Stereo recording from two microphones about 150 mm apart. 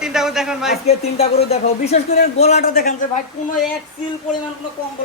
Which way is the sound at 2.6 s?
80° left.